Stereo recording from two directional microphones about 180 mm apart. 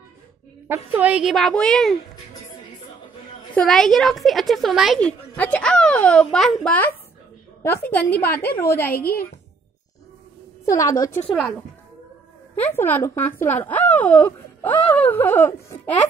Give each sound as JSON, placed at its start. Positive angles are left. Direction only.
{"t": 0.7, "sound": "a woman's voice", "side_deg": -10}
{"t": 3.5, "sound": "a woman's voice", "side_deg": 0}
{"t": 8.9, "sound": "a woman's voice", "side_deg": 55}
{"t": 10.7, "sound": "speech", "side_deg": 20}
{"t": 12.5, "sound": "speech", "side_deg": 10}